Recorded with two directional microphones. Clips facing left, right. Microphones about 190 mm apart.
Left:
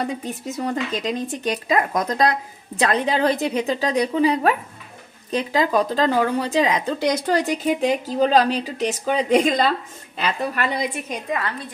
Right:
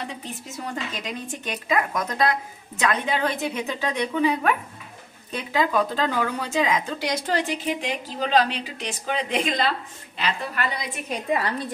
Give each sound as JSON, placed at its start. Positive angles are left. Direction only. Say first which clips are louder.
{"t": 0.0, "sound": "a woman's voice", "louder": "left 8 dB", "side_deg": 40}
{"t": 11.2, "sound": "a woman's voice", "louder": "right 2 dB", "side_deg": -30}